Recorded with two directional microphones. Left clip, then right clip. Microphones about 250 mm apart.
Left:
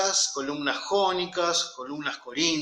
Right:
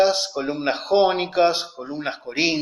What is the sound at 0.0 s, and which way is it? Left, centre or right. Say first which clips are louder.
Speech: right 6 dB; centre.